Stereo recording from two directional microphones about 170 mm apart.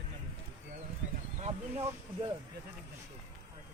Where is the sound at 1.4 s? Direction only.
35° right (ahead or behind).